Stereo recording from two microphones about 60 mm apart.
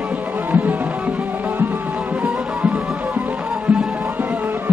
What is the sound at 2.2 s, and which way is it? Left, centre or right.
Music, right.